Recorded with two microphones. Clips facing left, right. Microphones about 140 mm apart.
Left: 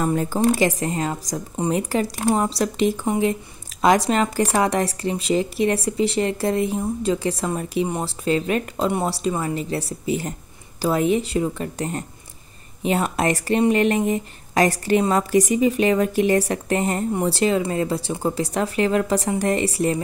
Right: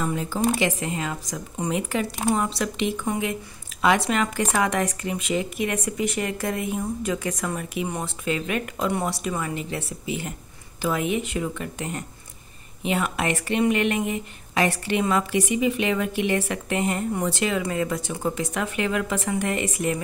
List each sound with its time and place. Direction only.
0.0 s speech: 45° left (ahead or behind)